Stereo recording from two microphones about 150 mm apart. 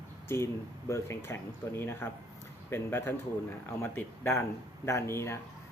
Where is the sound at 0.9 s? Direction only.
20° left (ahead or behind).